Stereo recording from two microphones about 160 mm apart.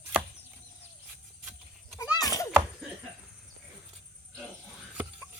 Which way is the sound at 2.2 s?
20° left (ahead or behind).